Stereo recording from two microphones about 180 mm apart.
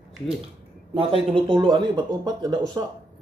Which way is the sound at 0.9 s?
30° right (ahead or behind).